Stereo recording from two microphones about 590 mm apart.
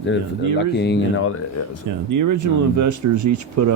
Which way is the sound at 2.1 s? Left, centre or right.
Right.